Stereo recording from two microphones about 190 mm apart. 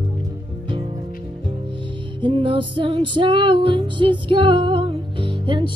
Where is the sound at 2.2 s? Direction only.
25° right (ahead or behind).